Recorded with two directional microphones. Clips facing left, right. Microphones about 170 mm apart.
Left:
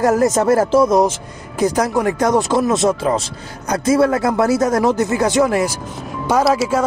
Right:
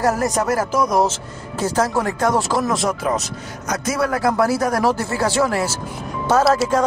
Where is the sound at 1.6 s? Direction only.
15° left (ahead or behind).